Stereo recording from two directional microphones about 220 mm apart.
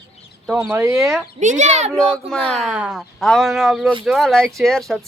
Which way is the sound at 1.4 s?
35° right (ahead or behind).